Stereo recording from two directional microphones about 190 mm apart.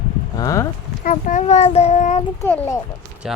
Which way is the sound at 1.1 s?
45° left (ahead or behind).